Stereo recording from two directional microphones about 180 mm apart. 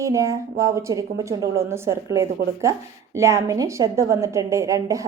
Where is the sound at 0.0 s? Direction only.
15° right (ahead or behind).